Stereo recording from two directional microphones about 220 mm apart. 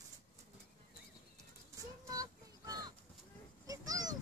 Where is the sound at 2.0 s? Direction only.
15° right (ahead or behind).